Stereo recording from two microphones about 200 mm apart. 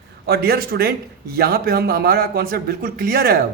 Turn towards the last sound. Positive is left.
turn(degrees=-50)  # may be behind; listen again after turning